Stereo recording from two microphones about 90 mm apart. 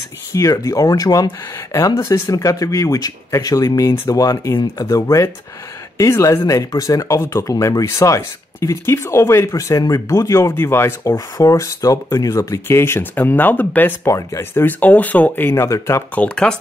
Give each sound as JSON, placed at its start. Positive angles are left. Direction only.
{"t": 0.3, "sound": "speech", "side_deg": 35}
{"t": 2.0, "sound": "speech", "side_deg": 30}
{"t": 2.3, "sound": "speech", "side_deg": 40}
{"t": 11.1, "sound": "speech", "side_deg": 40}
{"t": 14.0, "sound": "speech", "side_deg": 35}
{"t": 14.6, "sound": "speech", "side_deg": 20}
{"t": 15.6, "sound": "speech", "side_deg": 35}
{"t": 16.2, "sound": "speech", "side_deg": 10}